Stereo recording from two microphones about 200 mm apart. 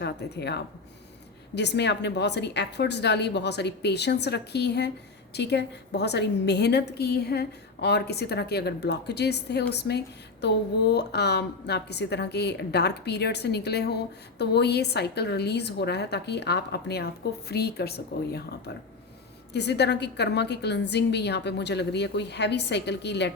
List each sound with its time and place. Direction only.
0.0 s a woman's voice: 55° left (ahead or behind)